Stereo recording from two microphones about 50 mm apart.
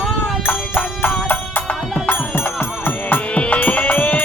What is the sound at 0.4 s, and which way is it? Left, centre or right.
Music, left.